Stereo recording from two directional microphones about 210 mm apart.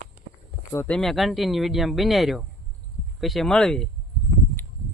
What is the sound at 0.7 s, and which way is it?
Speech, 5° left (ahead or behind).